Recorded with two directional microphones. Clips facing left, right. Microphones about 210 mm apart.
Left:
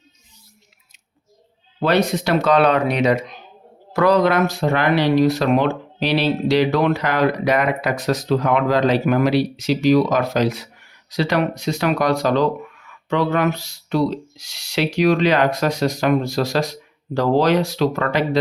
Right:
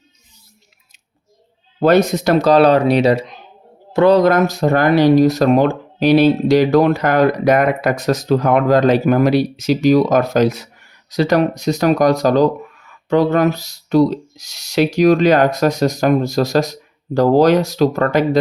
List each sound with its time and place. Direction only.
1.8 s a man's voice: 45° right (ahead or behind); by 4.2 s 25° right (ahead or behind)
4.2 s speech: 40° right (ahead or behind)